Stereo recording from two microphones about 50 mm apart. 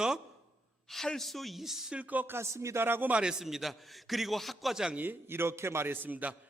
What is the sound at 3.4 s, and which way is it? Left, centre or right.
A man's voice, centre.